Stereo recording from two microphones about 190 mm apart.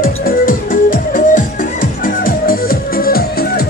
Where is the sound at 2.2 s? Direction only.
50° left (ahead or behind).